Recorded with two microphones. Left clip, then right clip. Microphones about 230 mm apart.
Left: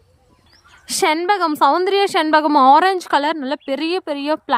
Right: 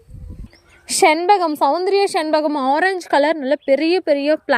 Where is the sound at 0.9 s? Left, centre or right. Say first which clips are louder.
Right 3 dB; centre.